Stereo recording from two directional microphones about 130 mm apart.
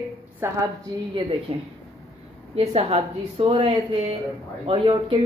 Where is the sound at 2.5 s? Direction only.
55° right (ahead or behind).